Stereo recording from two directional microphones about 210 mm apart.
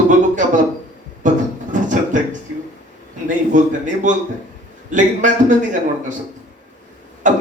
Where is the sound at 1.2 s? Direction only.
35° right (ahead or behind).